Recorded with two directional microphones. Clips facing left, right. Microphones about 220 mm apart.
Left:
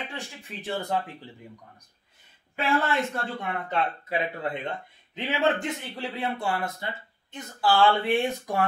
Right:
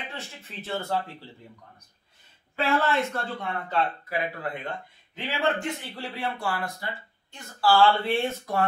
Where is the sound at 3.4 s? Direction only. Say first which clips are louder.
Right 1 dB; 20° left (ahead or behind).